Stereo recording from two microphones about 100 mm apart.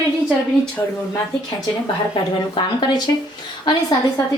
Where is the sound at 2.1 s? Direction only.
55° left (ahead or behind).